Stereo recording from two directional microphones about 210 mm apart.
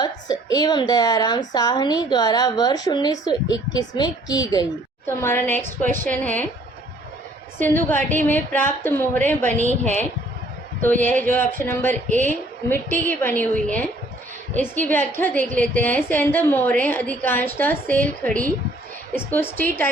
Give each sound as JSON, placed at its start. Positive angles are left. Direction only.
{"t": 0.0, "sound": "a woman's voice", "side_deg": 20}
{"t": 5.6, "sound": "a woman's voice", "side_deg": -40}
{"t": 6.1, "sound": "a woman's voice", "side_deg": 5}
{"t": 7.6, "sound": "a woman's voice", "side_deg": 10}
{"t": 10.8, "sound": "a woman's voice", "side_deg": 10}
{"t": 14.8, "sound": "a woman's voice", "side_deg": 10}